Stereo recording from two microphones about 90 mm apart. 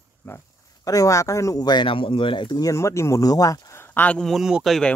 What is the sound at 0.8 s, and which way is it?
Speech, 40° left (ahead or behind).